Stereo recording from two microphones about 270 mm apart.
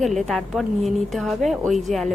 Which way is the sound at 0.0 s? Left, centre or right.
Centre.